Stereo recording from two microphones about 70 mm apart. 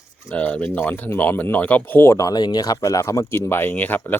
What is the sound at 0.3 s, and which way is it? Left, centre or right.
Speech, left.